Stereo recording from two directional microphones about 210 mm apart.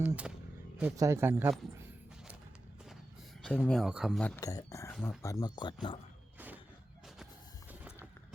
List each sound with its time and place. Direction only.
0.0 s speech: 5° right (ahead or behind)
3.4 s speech: 5° left (ahead or behind)
4.4 s speech: 15° left (ahead or behind)